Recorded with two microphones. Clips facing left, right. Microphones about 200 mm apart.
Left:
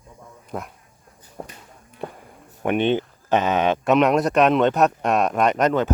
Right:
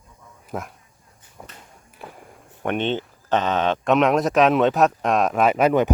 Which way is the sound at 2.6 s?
10° left (ahead or behind).